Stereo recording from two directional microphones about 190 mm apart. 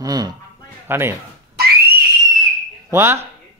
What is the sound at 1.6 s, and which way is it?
Whistle, 50° right (ahead or behind).